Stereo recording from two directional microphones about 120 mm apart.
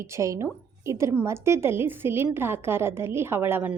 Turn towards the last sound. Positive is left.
turn(degrees=-15)  # may be behind; listen again after turning